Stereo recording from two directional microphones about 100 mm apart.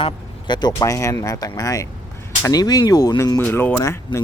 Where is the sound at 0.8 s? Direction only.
30° left (ahead or behind).